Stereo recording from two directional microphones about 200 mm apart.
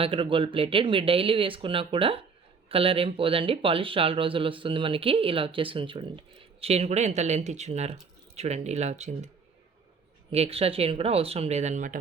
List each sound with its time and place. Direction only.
0.0 s speech: 25° right (ahead or behind)
10.3 s speech: 30° right (ahead or behind)